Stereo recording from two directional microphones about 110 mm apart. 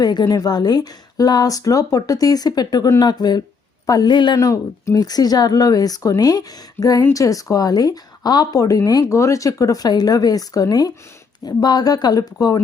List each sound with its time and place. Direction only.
0.0 s speech: 40° left (ahead or behind)
4.4 s speech: 30° left (ahead or behind)